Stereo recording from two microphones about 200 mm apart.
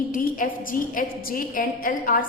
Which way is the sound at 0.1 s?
45° left (ahead or behind).